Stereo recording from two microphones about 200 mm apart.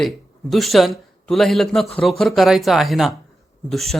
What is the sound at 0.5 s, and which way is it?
A man's voice, centre (ahead or behind).